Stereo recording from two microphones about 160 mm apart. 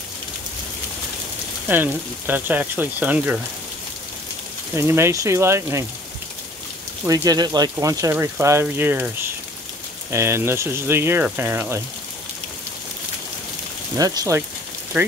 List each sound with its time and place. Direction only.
1.7 s speech: 10° right (ahead or behind)
4.7 s speech: 15° right (ahead or behind)
7.1 s speech: 25° right (ahead or behind)
13.9 s speech: 20° right (ahead or behind)
14.9 s speech: 10° right (ahead or behind)